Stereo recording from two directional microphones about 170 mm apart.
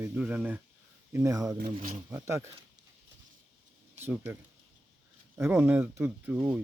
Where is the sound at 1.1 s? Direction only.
20° right (ahead or behind).